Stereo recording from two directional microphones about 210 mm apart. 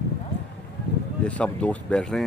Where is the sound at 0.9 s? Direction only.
55° left (ahead or behind).